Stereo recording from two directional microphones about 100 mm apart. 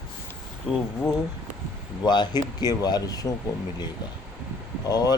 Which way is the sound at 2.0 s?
45° left (ahead or behind).